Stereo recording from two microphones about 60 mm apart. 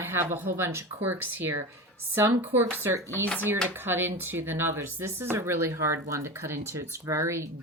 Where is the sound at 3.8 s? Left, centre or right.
Right.